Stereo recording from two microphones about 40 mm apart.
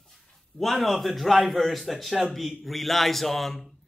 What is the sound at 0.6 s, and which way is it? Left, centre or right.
A man's voice, centre.